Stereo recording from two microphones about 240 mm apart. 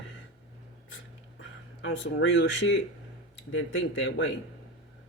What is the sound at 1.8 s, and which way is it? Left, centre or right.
Speech, left.